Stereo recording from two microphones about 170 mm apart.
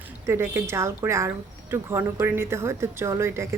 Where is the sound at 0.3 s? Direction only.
15° right (ahead or behind).